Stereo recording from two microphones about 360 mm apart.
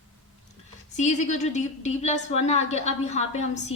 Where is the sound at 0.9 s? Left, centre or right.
Centre.